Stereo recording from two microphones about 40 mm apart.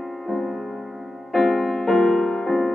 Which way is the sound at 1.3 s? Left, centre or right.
Centre.